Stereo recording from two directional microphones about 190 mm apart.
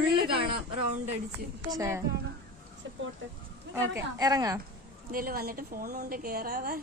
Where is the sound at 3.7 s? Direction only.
15° right (ahead or behind).